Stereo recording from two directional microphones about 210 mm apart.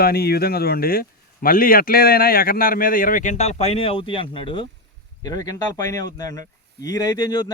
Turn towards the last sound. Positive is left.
turn(degrees=20)  # may be behind; listen again after turning